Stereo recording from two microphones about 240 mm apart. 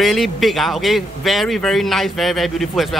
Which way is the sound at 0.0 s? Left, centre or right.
Centre.